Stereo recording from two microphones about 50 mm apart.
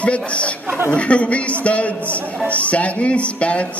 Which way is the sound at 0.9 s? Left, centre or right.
Left.